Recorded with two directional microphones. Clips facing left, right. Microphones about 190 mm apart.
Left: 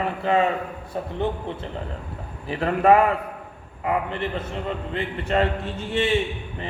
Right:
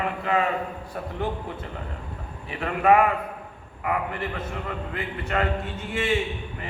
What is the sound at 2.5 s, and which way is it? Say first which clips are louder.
A man's voice: left 3 dB; 35° left (ahead or behind).